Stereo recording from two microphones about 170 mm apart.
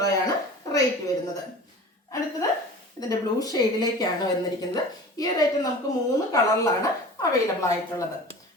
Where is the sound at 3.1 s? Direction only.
20° left (ahead or behind).